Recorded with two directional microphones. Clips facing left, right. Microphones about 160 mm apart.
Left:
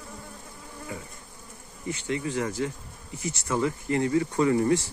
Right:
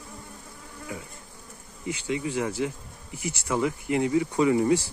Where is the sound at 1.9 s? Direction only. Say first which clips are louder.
Right 1 dB; 15° right (ahead or behind).